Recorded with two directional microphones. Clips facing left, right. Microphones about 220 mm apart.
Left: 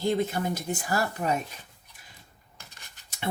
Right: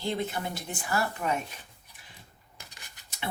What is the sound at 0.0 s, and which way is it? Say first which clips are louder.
Speech: left 5 dB; 40° left (ahead or behind).